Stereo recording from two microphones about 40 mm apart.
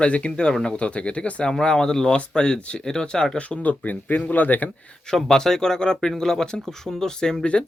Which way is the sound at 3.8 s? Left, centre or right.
Left.